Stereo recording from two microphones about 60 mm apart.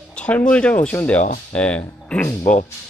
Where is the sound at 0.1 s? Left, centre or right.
Centre.